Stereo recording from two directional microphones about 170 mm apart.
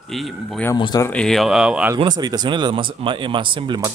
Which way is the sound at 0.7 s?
25° left (ahead or behind).